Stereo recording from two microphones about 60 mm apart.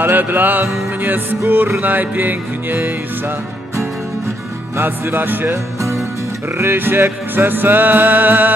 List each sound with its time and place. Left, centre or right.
0.0 s music: right
4.7 s music: right
6.6 s music: right